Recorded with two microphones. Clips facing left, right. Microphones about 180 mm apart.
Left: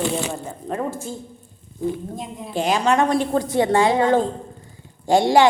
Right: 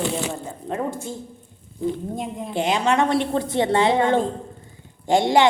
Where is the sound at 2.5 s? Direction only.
20° right (ahead or behind).